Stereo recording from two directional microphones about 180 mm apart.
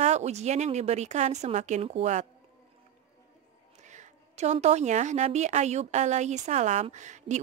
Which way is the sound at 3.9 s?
40° right (ahead or behind).